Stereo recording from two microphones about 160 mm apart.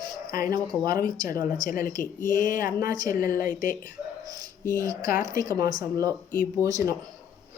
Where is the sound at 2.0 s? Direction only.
55° left (ahead or behind).